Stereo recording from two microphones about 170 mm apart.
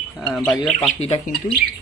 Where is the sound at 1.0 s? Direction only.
35° left (ahead or behind).